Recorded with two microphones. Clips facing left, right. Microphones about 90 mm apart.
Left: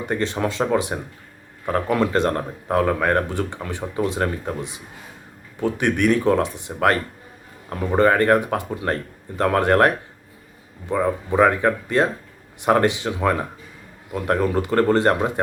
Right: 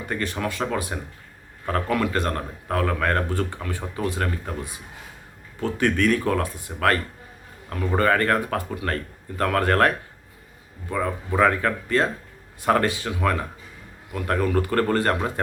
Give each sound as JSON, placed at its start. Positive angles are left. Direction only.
{"t": 0.0, "sound": "speech", "side_deg": 25}